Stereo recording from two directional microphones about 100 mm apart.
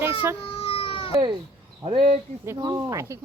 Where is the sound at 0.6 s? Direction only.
65° left (ahead or behind).